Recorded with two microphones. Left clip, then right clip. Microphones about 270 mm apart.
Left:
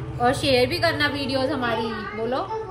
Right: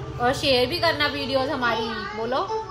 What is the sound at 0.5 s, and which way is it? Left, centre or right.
Speech, right.